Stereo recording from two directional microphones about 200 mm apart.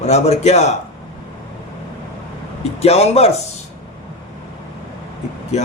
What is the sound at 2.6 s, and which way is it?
Speech, 30° left (ahead or behind).